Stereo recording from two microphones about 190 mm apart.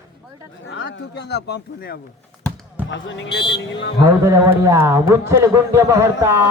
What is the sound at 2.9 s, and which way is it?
Speech, 75° left (ahead or behind).